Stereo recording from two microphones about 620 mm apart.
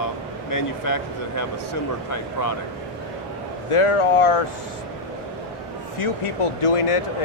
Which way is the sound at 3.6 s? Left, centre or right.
Left.